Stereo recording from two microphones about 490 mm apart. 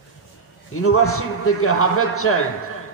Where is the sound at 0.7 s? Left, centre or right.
Left.